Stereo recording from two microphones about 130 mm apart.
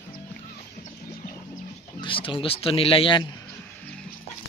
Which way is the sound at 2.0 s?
40° left (ahead or behind).